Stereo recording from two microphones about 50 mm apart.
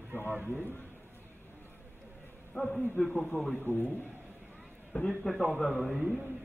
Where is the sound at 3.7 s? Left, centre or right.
Left.